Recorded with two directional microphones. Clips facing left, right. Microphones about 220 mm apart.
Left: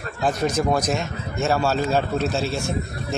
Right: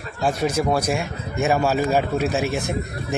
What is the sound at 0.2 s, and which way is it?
Speech, 10° right (ahead or behind).